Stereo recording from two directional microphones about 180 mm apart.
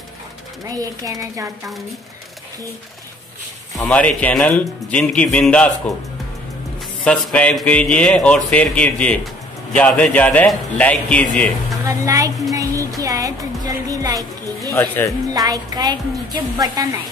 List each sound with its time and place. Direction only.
0.7 s speech: 20° right (ahead or behind)
3.7 s speech: 10° left (ahead or behind)
7.1 s speech: 5° left (ahead or behind)
11.8 s a woman's voice: 20° right (ahead or behind)
12.5 s music: 20° right (ahead or behind)
14.7 s speech: 15° left (ahead or behind)
15.3 s speech: 20° right (ahead or behind)